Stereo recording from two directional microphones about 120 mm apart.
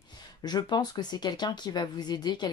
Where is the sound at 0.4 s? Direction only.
35° left (ahead or behind).